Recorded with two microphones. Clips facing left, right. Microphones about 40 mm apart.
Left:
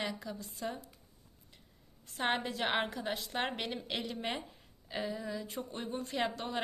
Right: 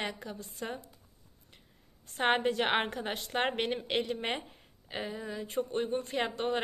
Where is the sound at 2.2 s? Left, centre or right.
Right.